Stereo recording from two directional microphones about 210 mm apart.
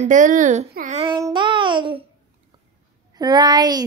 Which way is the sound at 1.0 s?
20° right (ahead or behind).